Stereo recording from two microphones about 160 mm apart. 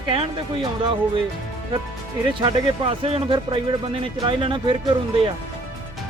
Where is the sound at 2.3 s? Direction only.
35° right (ahead or behind).